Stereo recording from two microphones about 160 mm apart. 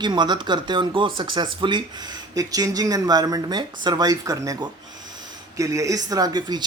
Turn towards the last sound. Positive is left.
turn(degrees=-25)  # may be behind; listen again after turning